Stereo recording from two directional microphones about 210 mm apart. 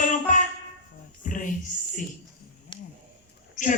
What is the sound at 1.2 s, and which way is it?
Music, 40° left (ahead or behind).